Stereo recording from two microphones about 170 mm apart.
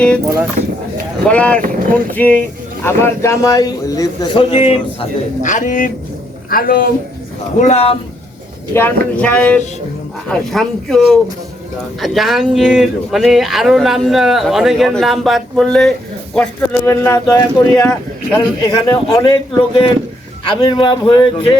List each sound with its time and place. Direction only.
1.3 s speech: 10° left (ahead or behind)
1.6 s speech: 55° right (ahead or behind)
2.1 s a man's voice: 10° left (ahead or behind); by 6.8 s 55° left (ahead or behind)
7.6 s speech: 40° left (ahead or behind)
8.7 s speech: 10° left (ahead or behind)
16.8 s a man's voice: 15° left (ahead or behind)